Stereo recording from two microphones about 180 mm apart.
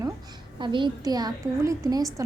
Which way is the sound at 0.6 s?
25° right (ahead or behind).